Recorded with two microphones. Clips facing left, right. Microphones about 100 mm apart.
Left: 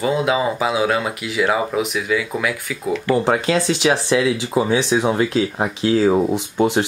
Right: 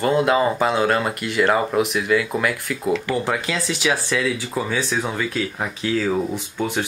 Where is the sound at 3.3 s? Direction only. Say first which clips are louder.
Left 6 dB; 25° left (ahead or behind).